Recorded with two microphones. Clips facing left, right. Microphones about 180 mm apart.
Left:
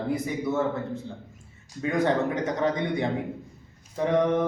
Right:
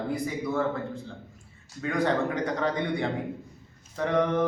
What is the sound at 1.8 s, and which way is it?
A man's voice, 20° left (ahead or behind).